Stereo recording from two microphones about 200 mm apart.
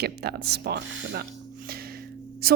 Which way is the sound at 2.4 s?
50° right (ahead or behind).